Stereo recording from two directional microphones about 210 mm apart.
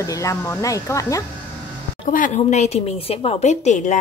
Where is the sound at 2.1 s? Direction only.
40° left (ahead or behind).